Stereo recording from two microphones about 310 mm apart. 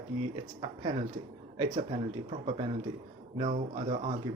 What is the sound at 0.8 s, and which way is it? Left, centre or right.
Speech, centre.